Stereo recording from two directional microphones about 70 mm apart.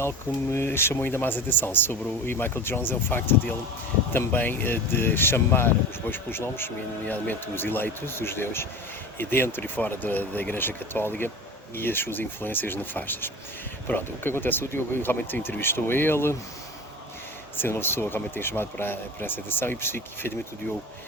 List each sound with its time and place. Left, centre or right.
0.5 s speech: left
17.6 s speech: left